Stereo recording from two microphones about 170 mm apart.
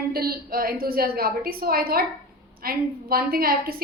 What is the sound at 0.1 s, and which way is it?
A woman's voice, 65° right (ahead or behind).